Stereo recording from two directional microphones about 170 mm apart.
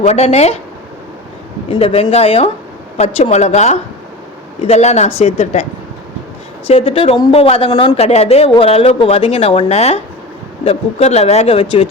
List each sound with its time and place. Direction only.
0.0 s speech: 40° left (ahead or behind)
1.7 s speech: 35° left (ahead or behind)
6.7 s speech: 35° left (ahead or behind)